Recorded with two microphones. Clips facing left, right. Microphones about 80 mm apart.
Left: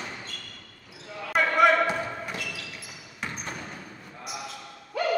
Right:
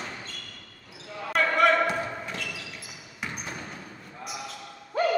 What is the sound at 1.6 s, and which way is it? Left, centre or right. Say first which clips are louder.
Basketball bounce: left 2 dB; centre.